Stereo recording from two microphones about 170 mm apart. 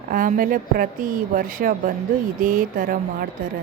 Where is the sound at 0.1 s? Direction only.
55° right (ahead or behind).